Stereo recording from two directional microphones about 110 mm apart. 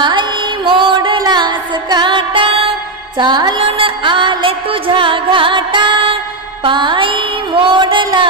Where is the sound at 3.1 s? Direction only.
40° right (ahead or behind).